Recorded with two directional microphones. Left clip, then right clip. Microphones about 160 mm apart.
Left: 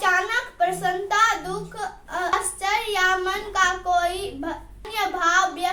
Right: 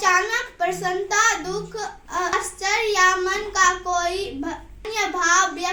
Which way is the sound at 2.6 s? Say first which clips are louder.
Right 3 dB; 15° left (ahead or behind).